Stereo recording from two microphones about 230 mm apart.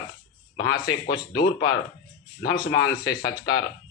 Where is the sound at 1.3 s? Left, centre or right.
Left.